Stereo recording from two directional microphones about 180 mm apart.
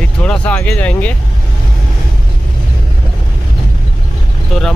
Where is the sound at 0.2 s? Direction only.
5° left (ahead or behind).